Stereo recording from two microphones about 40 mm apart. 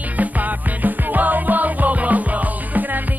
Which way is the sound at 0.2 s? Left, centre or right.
Right.